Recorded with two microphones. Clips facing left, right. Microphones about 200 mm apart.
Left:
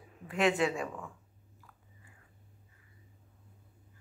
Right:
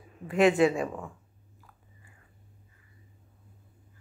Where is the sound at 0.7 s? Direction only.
30° right (ahead or behind).